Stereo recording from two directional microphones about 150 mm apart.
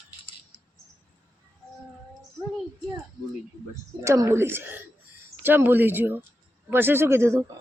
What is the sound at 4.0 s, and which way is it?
Speech, 20° right (ahead or behind).